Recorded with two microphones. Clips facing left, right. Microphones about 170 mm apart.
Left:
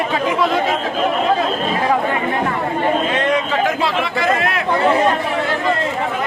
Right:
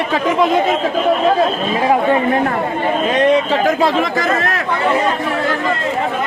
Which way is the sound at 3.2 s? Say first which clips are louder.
Right 4 dB; 40° right (ahead or behind).